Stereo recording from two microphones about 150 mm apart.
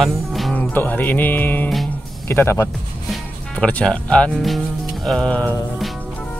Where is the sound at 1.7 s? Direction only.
Centre (ahead or behind).